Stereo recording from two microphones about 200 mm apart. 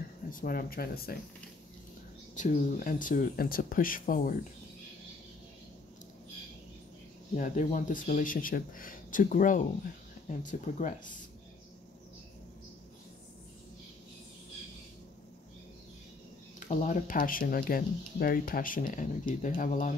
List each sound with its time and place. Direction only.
0.3 s speech: 45° left (ahead or behind)
2.3 s speech: 40° left (ahead or behind)
7.3 s speech: 40° left (ahead or behind)
16.5 s speech: 35° left (ahead or behind)